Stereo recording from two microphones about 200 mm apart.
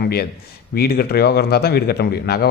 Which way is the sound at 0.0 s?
50° left (ahead or behind).